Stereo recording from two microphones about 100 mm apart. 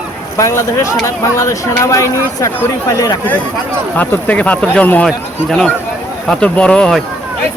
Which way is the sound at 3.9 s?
15° left (ahead or behind).